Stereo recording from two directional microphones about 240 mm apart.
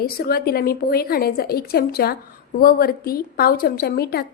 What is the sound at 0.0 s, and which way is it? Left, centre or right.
A woman's voice, left.